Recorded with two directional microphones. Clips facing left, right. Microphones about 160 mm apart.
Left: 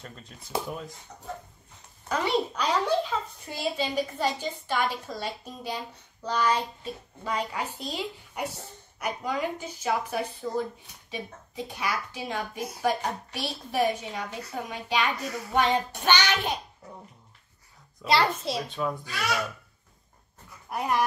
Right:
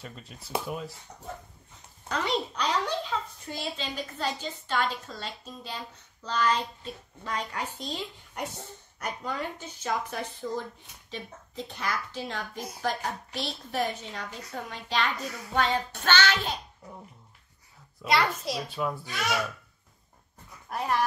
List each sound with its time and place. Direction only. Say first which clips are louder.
0.0 s a child's voice: right 1 dB; 5° right (ahead or behind)
2.0 s a child's voice: left 3 dB; 5° left (ahead or behind)
18.0 s a child's voice: left 2 dB; 30° left (ahead or behind)
18.7 s a child's voice: left 1 dB; 5° right (ahead or behind)
19.0 s speech: even; 20° right (ahead or behind)
20.7 s speech: left 1 dB; 10° left (ahead or behind)